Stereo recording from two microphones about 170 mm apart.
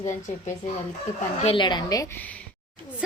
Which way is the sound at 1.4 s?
30° left (ahead or behind).